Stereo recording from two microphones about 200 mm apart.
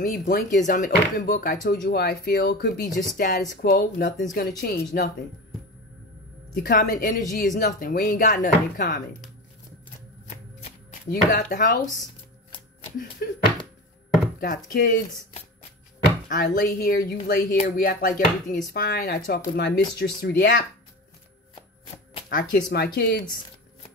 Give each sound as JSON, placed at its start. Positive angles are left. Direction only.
{"t": 0.0, "sound": "speech", "side_deg": 40}
{"t": 6.5, "sound": "speech", "side_deg": 50}
{"t": 10.2, "sound": "a sound", "side_deg": 30}
{"t": 11.1, "sound": "speech", "side_deg": 45}
{"t": 12.4, "sound": "a sound", "side_deg": 25}
{"t": 13.2, "sound": "speech", "side_deg": 50}
{"t": 14.4, "sound": "speech", "side_deg": 40}
{"t": 16.3, "sound": "speech", "side_deg": 40}
{"t": 22.3, "sound": "speech", "side_deg": 45}
{"t": 22.7, "sound": "speech", "side_deg": 55}